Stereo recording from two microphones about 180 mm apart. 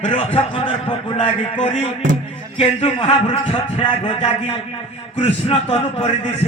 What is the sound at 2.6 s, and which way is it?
A man's voice, 35° left (ahead or behind).